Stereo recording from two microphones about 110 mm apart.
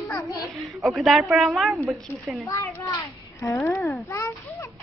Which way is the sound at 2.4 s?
30° left (ahead or behind).